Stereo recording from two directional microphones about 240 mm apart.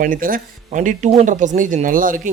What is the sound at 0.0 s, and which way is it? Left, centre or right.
Speech, right.